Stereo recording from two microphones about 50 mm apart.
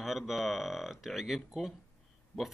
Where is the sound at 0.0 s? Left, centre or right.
Centre.